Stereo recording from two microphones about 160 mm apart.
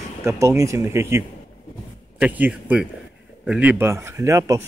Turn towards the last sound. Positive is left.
turn(degrees=-20)  # may be behind; listen again after turning